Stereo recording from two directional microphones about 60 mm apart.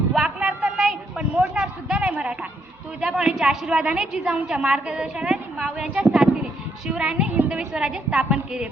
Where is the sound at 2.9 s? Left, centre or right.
Centre.